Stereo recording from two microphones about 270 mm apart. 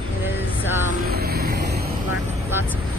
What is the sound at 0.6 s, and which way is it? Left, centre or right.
Speech, centre.